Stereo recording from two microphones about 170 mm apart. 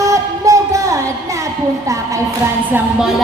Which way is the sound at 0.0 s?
20° right (ahead or behind).